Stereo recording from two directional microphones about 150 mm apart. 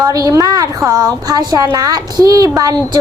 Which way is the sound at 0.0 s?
25° right (ahead or behind).